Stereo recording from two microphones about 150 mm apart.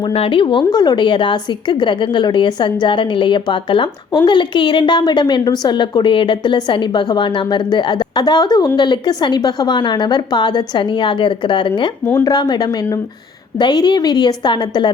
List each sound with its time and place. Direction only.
0.0 s a woman's voice: 35° left (ahead or behind)
12.0 s speech: 15° left (ahead or behind)
12.3 s a woman's voice: 30° left (ahead or behind)